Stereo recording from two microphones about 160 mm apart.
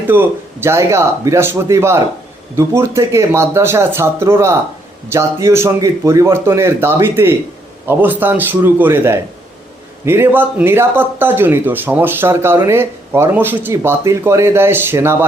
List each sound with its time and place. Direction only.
0.1 s speech: 15° right (ahead or behind)